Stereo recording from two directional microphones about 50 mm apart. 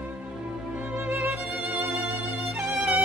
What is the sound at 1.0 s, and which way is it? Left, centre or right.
Music, right.